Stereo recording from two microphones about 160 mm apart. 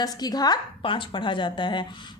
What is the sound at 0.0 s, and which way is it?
A woman's voice, 25° left (ahead or behind).